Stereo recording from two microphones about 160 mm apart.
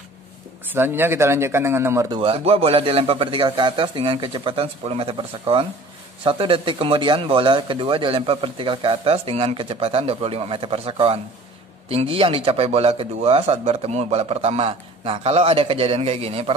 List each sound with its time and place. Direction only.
0.7 s speech: 15° right (ahead or behind)
2.1 s a man's voice: 35° right (ahead or behind)